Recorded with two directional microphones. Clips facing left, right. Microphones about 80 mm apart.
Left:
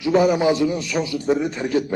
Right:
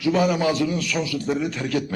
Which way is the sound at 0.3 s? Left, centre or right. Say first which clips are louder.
Left 3 dB; left.